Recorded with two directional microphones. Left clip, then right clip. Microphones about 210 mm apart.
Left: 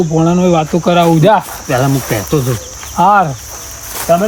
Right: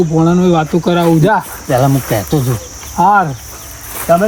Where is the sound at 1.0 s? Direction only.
45° left (ahead or behind).